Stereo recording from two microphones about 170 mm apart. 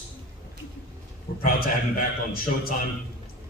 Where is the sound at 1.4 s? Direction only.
55° left (ahead or behind).